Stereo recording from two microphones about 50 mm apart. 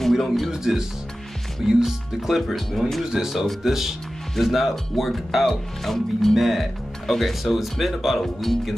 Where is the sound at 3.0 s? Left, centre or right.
Centre.